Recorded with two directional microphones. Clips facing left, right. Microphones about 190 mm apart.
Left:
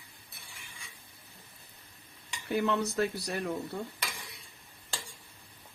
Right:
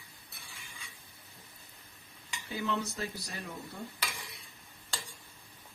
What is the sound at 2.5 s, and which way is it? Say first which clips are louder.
Speech: left 6 dB; 65° left (ahead or behind).